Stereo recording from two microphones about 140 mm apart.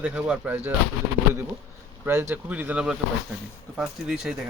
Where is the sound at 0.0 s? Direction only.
5° right (ahead or behind).